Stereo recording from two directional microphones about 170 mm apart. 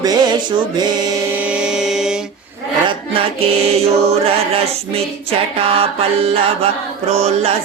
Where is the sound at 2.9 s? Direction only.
35° right (ahead or behind).